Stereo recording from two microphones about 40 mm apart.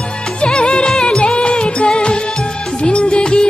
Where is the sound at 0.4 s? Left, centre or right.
Left.